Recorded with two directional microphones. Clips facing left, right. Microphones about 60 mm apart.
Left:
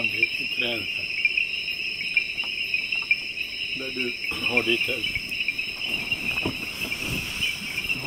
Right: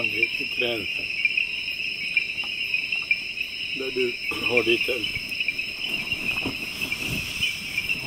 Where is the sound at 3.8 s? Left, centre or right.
Centre.